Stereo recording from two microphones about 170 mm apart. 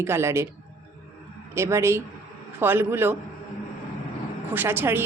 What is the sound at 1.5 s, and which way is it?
Speech, 15° right (ahead or behind).